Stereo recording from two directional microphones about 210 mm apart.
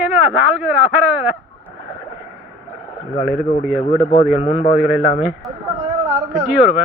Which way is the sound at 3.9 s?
20° left (ahead or behind).